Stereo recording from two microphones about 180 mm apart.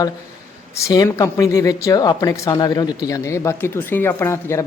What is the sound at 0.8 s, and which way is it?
A man's voice, 15° left (ahead or behind).